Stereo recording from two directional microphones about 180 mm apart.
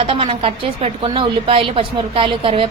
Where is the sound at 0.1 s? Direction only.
30° right (ahead or behind).